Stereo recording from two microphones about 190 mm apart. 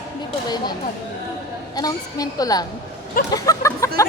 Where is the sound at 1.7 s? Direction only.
20° left (ahead or behind).